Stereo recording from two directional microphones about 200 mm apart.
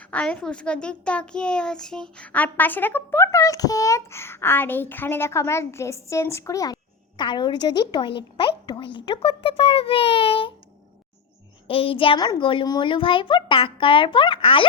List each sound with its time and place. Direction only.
0.0 s a child's voice: 5° left (ahead or behind); by 10.5 s 25° left (ahead or behind)
11.7 s a child's voice: 25° left (ahead or behind)